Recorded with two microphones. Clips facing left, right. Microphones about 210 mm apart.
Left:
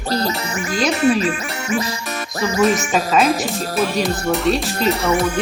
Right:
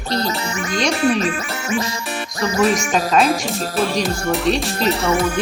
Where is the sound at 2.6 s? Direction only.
Centre (ahead or behind).